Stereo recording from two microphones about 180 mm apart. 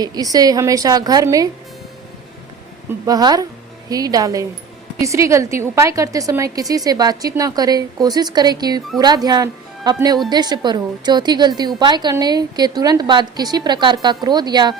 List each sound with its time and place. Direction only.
0.0 s a woman's voice: 20° right (ahead or behind)
3.1 s a woman's voice: 20° right (ahead or behind)